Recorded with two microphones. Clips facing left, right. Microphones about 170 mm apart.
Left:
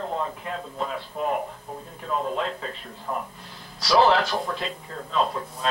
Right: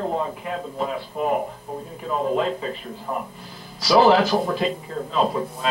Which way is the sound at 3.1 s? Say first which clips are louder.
Right 2 dB; 15° right (ahead or behind).